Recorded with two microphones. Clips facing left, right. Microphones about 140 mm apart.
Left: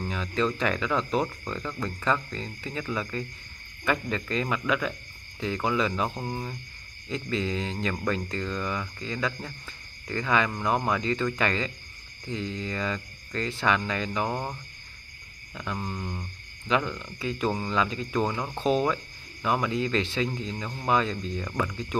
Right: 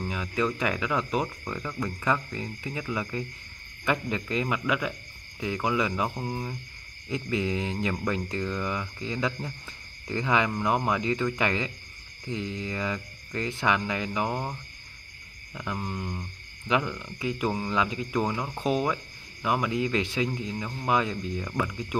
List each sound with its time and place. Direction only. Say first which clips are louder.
0.1 s speech: left 1 dB; 10° right (ahead or behind)